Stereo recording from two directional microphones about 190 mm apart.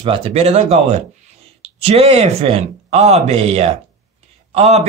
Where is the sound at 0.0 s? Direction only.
30° right (ahead or behind).